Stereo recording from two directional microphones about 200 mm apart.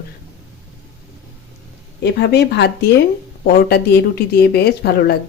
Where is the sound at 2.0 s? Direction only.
55° left (ahead or behind).